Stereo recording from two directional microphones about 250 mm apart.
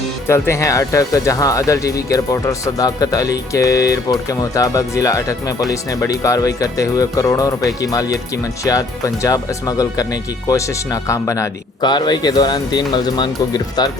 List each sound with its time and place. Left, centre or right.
0.3 s speech: centre
9.2 s speech: centre
11.1 s speech: centre